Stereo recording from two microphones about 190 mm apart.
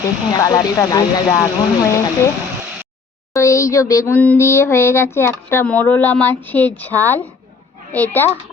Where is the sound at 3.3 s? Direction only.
15° left (ahead or behind).